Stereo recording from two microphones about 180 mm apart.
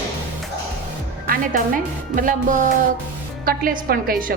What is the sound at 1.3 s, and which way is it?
A woman's voice, 50° right (ahead or behind).